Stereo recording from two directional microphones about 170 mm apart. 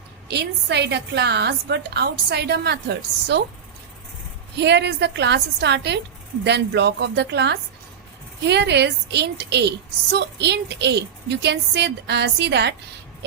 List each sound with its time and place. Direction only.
0.3 s a woman's voice: 80° right
4.5 s a woman's voice: 85° right